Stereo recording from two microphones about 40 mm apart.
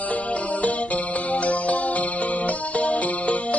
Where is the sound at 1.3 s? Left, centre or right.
Left.